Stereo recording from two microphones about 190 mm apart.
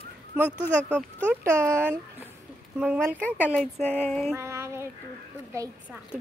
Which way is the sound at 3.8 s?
10° left (ahead or behind).